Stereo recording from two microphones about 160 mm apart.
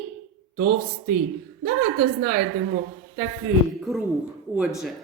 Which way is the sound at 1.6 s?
60° right (ahead or behind).